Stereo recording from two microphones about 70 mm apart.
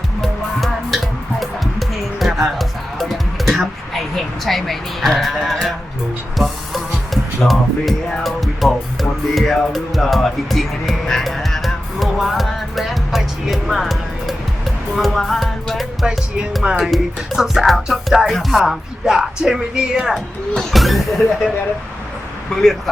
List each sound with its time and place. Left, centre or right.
0.2 s music: centre
16.6 s speech: centre
16.9 s music: centre
20.6 s music: centre